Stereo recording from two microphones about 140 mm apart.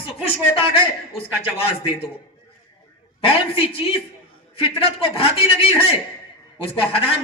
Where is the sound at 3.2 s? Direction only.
40° left (ahead or behind).